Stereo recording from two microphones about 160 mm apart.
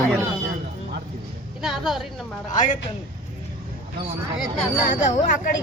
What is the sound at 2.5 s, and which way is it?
Speech, 50° left (ahead or behind).